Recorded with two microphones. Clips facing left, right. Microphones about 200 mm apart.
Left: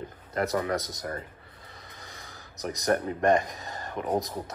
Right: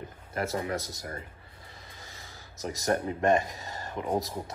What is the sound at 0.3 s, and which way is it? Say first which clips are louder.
Speech: left 4 dB; 25° right (ahead or behind).